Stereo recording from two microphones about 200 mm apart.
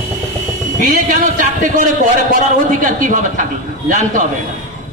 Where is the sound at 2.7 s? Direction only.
40° right (ahead or behind).